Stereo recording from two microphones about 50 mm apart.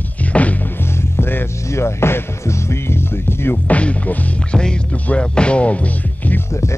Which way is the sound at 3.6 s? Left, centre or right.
Left.